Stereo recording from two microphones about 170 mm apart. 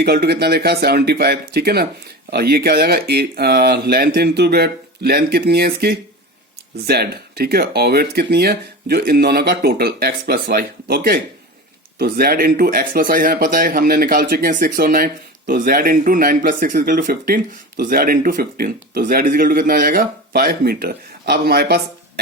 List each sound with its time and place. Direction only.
0.0 s speech: 70° right (ahead or behind)